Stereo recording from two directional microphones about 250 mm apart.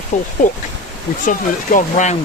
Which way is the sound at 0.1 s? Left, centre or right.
Left.